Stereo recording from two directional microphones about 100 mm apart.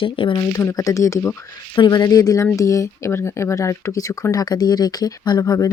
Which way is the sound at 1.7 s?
45° left (ahead or behind).